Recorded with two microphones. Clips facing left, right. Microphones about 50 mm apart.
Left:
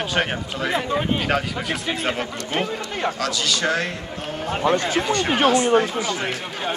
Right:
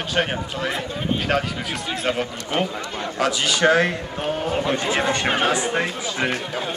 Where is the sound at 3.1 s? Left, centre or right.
Right.